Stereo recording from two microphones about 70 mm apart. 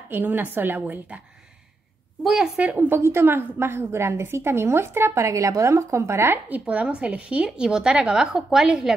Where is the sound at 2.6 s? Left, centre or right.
Right.